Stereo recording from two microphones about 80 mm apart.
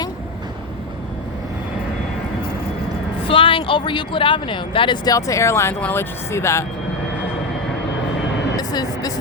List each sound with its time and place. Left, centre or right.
3.3 s speech: left
5.0 s speech: left
8.5 s vehicle: left